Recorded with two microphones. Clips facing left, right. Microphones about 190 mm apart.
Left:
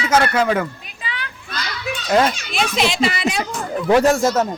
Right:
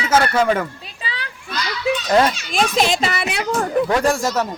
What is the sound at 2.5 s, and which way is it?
Speech, 45° right (ahead or behind).